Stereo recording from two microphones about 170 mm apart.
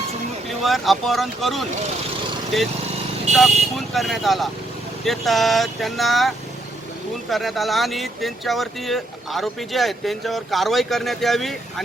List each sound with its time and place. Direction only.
0.6 s speech: centre (ahead or behind)
3.3 s speech: 40° right (ahead or behind)
3.8 s speech: centre (ahead or behind)